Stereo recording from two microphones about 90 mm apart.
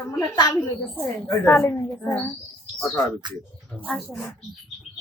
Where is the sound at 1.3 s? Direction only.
30° left (ahead or behind).